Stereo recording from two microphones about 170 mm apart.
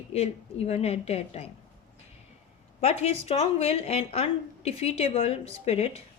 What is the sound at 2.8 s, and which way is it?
Speech, 35° left (ahead or behind).